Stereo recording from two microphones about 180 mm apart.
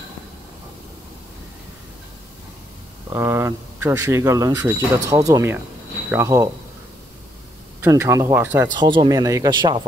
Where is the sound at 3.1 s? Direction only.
15° right (ahead or behind).